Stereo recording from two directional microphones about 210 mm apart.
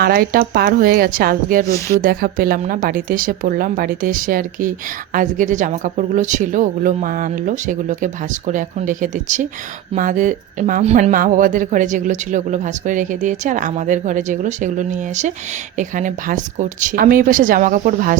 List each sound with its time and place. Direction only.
0.0 s a woman's voice: 45° right (ahead or behind)